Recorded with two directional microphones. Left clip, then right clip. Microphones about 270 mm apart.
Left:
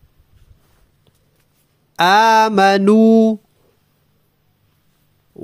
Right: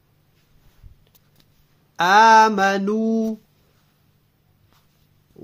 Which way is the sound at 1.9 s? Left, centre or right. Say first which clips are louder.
Left 1 dB; left.